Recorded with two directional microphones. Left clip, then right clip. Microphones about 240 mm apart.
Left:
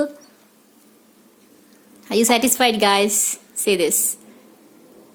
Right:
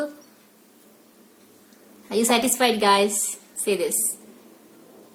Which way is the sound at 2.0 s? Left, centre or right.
Left.